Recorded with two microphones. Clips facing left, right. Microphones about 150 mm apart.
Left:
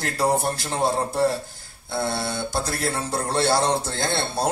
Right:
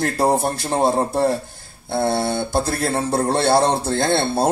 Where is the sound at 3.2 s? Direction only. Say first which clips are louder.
Right 4 dB; 60° right (ahead or behind).